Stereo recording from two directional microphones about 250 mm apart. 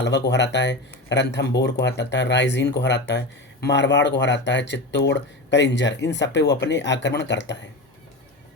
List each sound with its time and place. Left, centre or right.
0.0 s speech: left